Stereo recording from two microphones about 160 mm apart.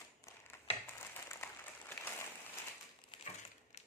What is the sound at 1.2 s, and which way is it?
Applause, 15° left (ahead or behind).